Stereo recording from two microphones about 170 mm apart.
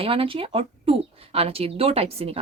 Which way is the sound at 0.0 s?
30° right (ahead or behind).